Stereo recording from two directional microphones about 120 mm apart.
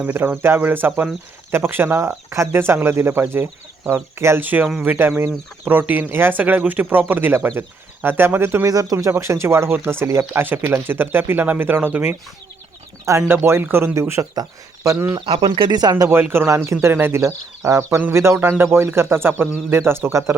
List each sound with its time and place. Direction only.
0.0 s speech: 15° right (ahead or behind)
8.7 s speech: 30° right (ahead or behind)
15.4 s speech: 40° right (ahead or behind)
16.3 s speech: 20° right (ahead or behind)